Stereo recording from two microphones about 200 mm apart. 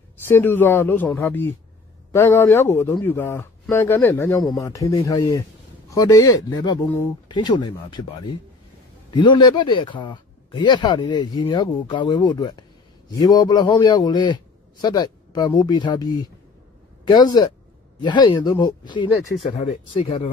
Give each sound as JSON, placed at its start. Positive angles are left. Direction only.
{"t": 0.3, "sound": "a man's voice", "side_deg": 10}
{"t": 9.1, "sound": "speech", "side_deg": 20}